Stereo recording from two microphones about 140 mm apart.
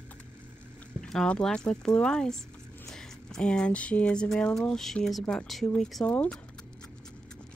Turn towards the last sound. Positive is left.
turn(degrees=5)  # may be behind; listen again after turning